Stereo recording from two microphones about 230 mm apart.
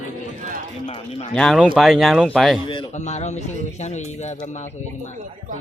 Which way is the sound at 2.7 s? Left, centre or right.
Left.